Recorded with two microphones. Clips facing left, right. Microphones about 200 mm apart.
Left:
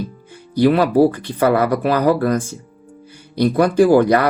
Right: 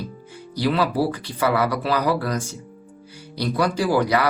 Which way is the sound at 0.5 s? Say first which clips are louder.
Left 8 dB; 50° left (ahead or behind).